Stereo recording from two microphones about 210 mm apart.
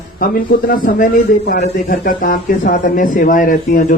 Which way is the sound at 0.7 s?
40° left (ahead or behind).